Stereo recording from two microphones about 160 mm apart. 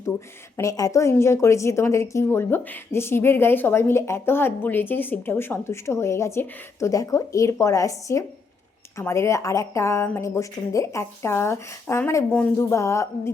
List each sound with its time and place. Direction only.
0.5 s a woman's voice: 20° left (ahead or behind)
12.5 s speech: 20° left (ahead or behind)